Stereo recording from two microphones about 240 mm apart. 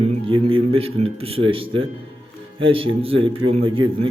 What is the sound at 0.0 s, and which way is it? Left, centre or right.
Speech, right.